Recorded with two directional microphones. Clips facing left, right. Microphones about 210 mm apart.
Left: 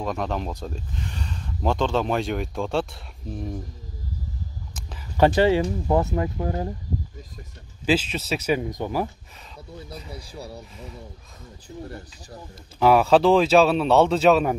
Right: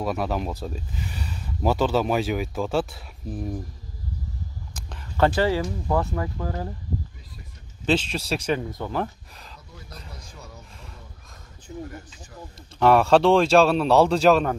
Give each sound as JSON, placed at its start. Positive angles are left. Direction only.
{"t": 0.0, "sound": "speech", "side_deg": -5}
{"t": 4.7, "sound": "a sound", "side_deg": 0}
{"t": 5.1, "sound": "speech", "side_deg": 15}
{"t": 7.8, "sound": "speech", "side_deg": 5}
{"t": 10.3, "sound": "speech", "side_deg": 35}
{"t": 11.6, "sound": "speech", "side_deg": 35}
{"t": 12.7, "sound": "speech", "side_deg": 5}